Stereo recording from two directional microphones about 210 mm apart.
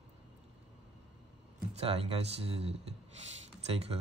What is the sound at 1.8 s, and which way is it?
Speech, 30° right (ahead or behind).